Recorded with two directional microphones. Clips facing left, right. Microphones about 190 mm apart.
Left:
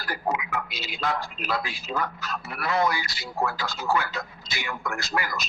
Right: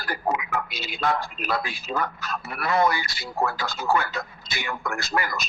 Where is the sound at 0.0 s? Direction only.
50° right (ahead or behind).